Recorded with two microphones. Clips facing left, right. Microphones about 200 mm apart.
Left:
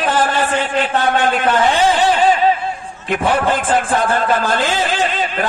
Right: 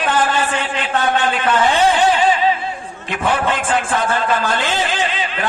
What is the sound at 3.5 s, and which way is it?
A man's voice, 45° left (ahead or behind).